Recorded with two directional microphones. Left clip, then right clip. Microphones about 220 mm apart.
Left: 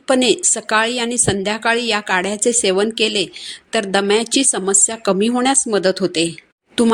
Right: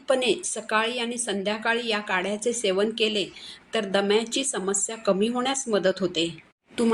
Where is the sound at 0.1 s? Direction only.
45° left (ahead or behind).